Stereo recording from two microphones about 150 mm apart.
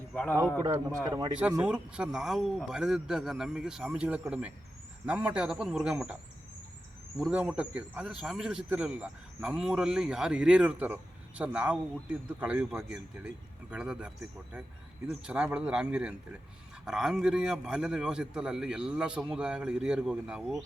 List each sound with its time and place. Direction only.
0.1 s a man's voice: 10° left (ahead or behind)
0.6 s speech: 25° right (ahead or behind)
1.6 s speech: 5° right (ahead or behind)
7.2 s speech: 5° right (ahead or behind)